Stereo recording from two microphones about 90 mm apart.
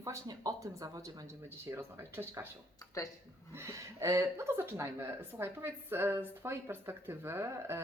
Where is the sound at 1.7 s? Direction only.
25° right (ahead or behind).